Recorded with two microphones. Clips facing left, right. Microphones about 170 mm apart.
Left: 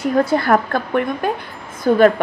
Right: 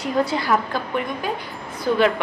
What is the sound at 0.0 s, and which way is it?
A woman's voice, 50° left (ahead or behind).